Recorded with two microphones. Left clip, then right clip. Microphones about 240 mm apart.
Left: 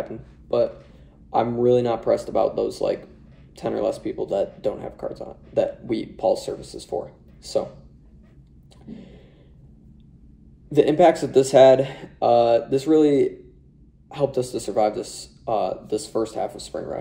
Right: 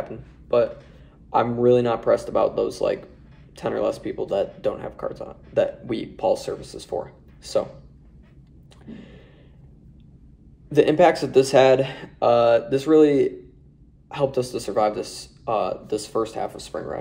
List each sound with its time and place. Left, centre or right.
1.3 s speech: centre
8.8 s a sound: centre
10.7 s speech: centre